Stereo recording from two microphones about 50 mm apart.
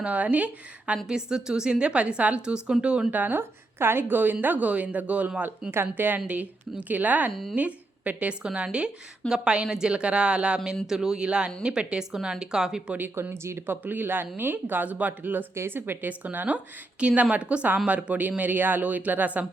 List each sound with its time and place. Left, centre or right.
0.0 s speech: right
1.0 s a woman's voice: centre
3.1 s speech: right
3.8 s speech: right
5.9 s speech: right
6.1 s a woman's voice: right; by 12.8 s centre
13.3 s speech: right
13.8 s speech: right
15.5 s speech: right
17.0 s speech: right